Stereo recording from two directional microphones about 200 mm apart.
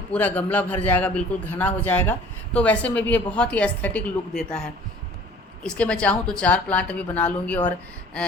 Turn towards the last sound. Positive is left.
turn(degrees=5)  # may be behind; listen again after turning